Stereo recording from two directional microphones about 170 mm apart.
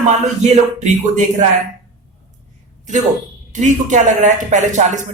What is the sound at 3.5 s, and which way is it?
Speech, 45° right (ahead or behind).